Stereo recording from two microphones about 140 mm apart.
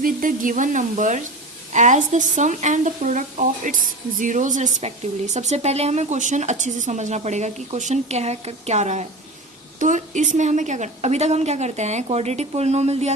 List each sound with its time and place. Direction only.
0.0 s a woman's voice: 75° right (ahead or behind); by 13.1 s 50° right (ahead or behind)